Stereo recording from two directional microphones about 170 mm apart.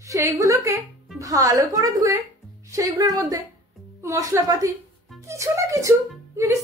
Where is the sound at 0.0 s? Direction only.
20° right (ahead or behind).